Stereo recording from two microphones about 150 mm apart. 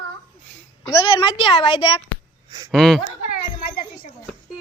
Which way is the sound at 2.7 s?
Centre (ahead or behind).